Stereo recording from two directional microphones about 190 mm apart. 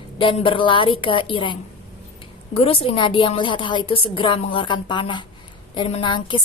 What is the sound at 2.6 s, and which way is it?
A woman's voice, 30° left (ahead or behind).